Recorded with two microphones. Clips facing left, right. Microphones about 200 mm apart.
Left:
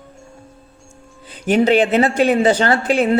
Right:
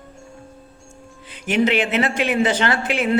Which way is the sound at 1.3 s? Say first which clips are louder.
Left 5 dB; 35° left (ahead or behind).